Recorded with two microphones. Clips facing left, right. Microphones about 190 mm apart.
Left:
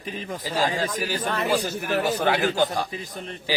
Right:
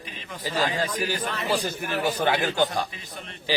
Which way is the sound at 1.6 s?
10° left (ahead or behind).